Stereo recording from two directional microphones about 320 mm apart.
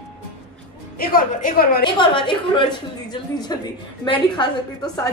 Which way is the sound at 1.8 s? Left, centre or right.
Centre.